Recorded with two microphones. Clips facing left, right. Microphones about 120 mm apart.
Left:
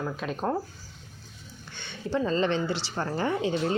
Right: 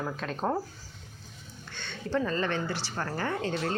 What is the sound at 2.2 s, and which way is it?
A woman's voice, 25° left (ahead or behind).